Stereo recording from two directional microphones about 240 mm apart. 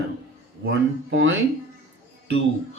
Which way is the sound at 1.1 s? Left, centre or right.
Right.